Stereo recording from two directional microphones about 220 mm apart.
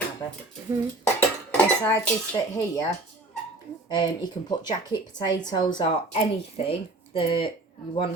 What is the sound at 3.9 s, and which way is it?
A woman's voice, 20° left (ahead or behind).